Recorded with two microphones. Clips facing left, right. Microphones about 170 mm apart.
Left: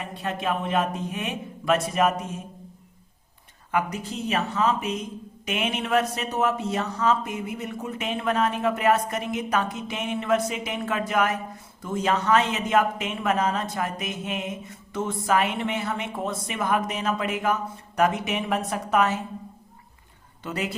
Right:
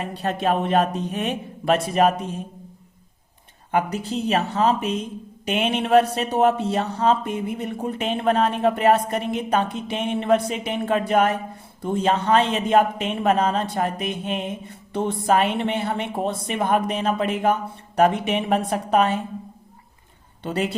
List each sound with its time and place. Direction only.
0.0 s a man's voice: 35° right (ahead or behind)
3.7 s a man's voice: 35° right (ahead or behind)
20.4 s a man's voice: 30° right (ahead or behind)